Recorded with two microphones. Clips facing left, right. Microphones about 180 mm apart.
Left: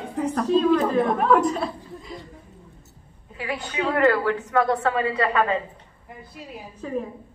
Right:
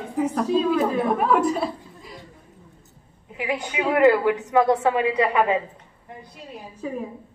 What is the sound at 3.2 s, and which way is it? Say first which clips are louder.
A woman's voice: right 3 dB; 15° right (ahead or behind).